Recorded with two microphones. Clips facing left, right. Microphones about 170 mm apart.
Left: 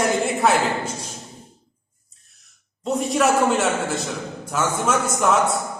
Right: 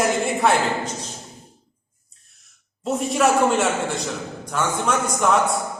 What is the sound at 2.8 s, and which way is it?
A man's voice, centre (ahead or behind).